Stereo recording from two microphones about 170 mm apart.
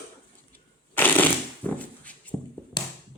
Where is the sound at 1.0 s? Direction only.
10° left (ahead or behind).